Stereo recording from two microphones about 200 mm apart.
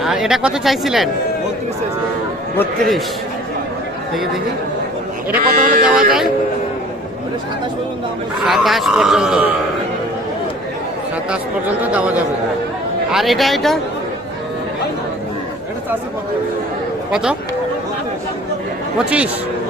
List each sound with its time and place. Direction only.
0.0 s speech: centre (ahead or behind)
2.6 s speech: centre (ahead or behind)
5.4 s speech: 45° right (ahead or behind)
8.4 s speech: centre (ahead or behind)
11.8 s a man's voice: 5° right (ahead or behind)
17.1 s speech: 5° right (ahead or behind)
18.9 s speech: 5° right (ahead or behind)